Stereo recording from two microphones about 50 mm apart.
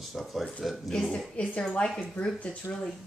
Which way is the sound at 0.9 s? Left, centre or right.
Centre.